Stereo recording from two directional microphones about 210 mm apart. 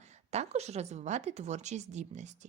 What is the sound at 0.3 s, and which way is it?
Speech, 30° right (ahead or behind).